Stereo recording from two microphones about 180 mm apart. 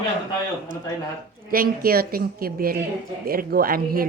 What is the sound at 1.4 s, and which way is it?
A woman's voice, 55° right (ahead or behind).